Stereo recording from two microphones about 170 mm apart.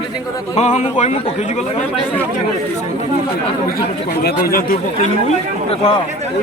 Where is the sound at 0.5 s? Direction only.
40° left (ahead or behind).